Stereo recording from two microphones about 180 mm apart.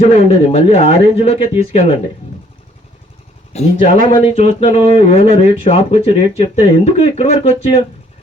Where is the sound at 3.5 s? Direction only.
35° left (ahead or behind).